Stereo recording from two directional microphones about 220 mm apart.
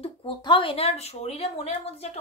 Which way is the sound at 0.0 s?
25° left (ahead or behind).